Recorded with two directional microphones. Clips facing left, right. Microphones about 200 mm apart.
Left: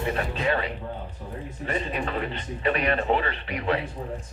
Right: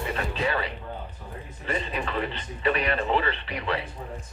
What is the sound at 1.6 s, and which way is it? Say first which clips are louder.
Speech: left 1 dB; 40° left (ahead or behind).